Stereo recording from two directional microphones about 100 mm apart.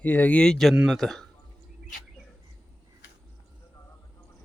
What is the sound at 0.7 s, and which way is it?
Speech, 5° right (ahead or behind).